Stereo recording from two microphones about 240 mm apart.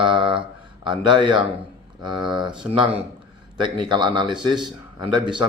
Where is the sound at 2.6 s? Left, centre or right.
Centre.